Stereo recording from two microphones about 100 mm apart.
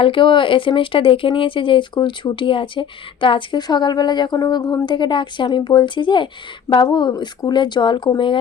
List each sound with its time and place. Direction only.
0.0 s speech: 55° left (ahead or behind)
6.7 s speech: 35° left (ahead or behind); by 8.4 s 55° left (ahead or behind)